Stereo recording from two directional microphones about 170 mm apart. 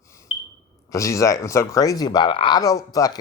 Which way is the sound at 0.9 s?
20° left (ahead or behind).